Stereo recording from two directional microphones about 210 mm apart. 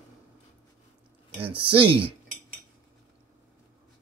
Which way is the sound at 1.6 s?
25° right (ahead or behind).